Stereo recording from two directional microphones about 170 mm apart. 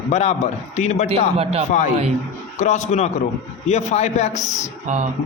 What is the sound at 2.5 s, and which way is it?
A man's voice, 45° left (ahead or behind).